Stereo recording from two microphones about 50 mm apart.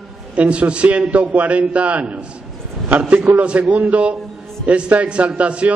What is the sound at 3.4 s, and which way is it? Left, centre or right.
A man's voice, right.